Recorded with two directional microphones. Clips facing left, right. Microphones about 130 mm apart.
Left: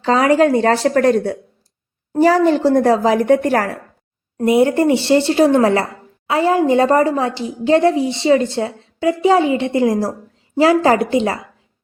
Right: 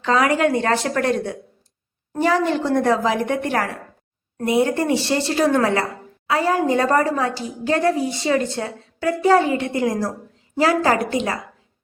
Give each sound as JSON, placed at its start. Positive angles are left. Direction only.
{"t": 0.0, "sound": "speech", "side_deg": 30}
{"t": 4.4, "sound": "a woman's voice", "side_deg": 25}